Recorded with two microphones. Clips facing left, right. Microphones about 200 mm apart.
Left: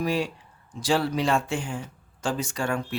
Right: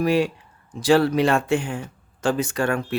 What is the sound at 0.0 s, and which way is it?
Speech, 65° right (ahead or behind).